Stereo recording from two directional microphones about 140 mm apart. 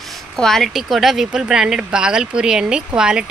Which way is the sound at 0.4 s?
Centre (ahead or behind).